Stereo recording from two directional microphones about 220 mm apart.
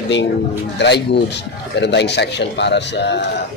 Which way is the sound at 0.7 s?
50° left (ahead or behind).